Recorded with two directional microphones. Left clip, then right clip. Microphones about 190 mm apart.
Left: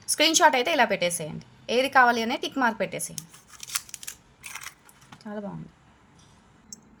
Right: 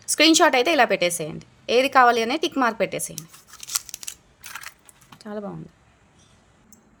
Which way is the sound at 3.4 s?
20° right (ahead or behind).